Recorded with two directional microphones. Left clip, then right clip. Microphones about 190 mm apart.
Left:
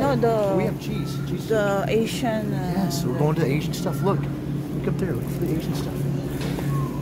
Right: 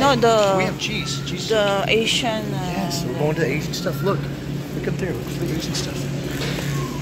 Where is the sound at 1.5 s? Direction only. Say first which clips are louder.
Right 4 dB; 15° left (ahead or behind).